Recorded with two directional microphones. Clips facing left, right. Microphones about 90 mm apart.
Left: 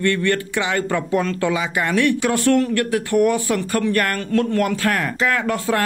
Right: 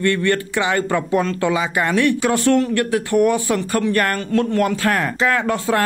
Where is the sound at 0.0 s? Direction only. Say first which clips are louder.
Right 1 dB; 30° right (ahead or behind).